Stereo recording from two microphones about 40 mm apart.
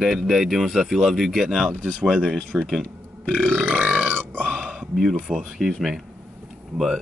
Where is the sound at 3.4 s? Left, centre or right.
Centre.